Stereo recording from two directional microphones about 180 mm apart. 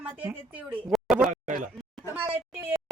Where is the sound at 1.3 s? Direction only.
45° right (ahead or behind).